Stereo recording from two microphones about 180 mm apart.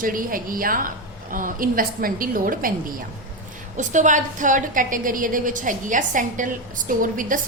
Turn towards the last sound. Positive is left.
turn(degrees=-50)  # may be behind; listen again after turning